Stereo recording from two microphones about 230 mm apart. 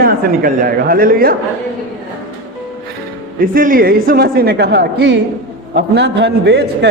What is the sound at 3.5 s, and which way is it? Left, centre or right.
A man's voice, right.